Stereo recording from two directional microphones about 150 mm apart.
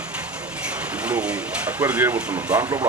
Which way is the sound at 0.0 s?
10° right (ahead or behind).